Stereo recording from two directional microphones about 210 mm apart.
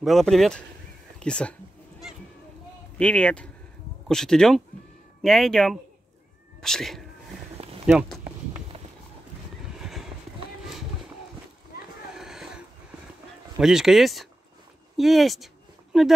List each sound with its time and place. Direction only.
0.0 s speech: centre (ahead or behind)
3.0 s speech: 5° left (ahead or behind)
9.8 s horse: centre (ahead or behind)
12.1 s a sound: centre (ahead or behind)
13.6 s speech: centre (ahead or behind)
15.0 s a sound: centre (ahead or behind)